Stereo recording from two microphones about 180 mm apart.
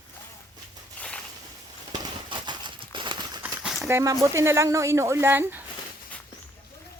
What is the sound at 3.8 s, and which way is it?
Speech, 15° right (ahead or behind).